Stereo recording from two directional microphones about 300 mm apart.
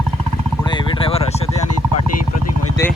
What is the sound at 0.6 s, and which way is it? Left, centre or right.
Vehicle, centre.